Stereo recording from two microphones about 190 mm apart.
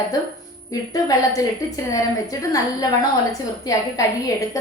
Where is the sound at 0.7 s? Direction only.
20° left (ahead or behind).